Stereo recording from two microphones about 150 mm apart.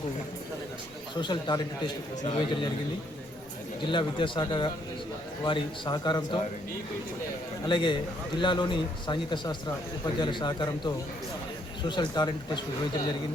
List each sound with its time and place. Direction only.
1.2 s a man's voice: 30° left (ahead or behind)
3.9 s a man's voice: 30° left (ahead or behind)
7.7 s a man's voice: 30° left (ahead or behind)